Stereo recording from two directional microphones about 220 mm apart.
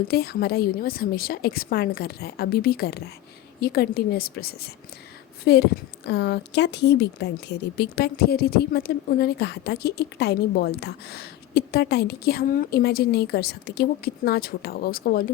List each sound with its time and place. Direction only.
0.1 s speech: 45° left (ahead or behind)